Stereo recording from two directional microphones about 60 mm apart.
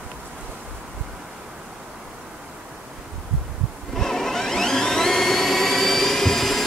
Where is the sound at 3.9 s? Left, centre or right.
Centre.